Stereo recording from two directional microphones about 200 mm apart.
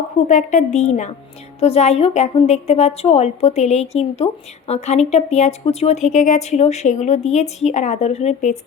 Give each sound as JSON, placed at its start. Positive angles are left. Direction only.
{"t": 0.3, "sound": "a woman's voice", "side_deg": 40}